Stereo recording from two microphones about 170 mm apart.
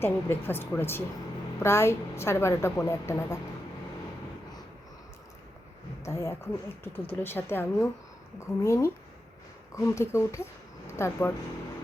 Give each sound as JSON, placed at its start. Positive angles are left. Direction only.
{"t": 0.0, "sound": "a woman's voice", "side_deg": 15}
{"t": 6.0, "sound": "a woman's voice", "side_deg": 15}